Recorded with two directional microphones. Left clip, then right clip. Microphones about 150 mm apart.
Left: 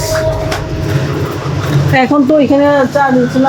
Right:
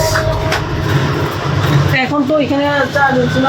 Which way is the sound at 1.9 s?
40° left (ahead or behind).